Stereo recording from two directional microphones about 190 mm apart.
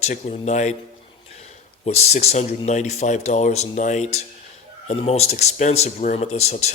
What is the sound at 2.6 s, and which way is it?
Speech, 35° left (ahead or behind).